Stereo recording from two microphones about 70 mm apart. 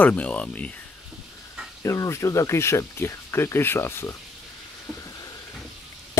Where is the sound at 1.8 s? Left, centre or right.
Left.